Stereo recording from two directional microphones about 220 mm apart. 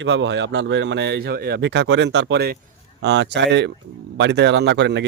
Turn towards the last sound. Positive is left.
turn(degrees=-50)  # may be behind; listen again after turning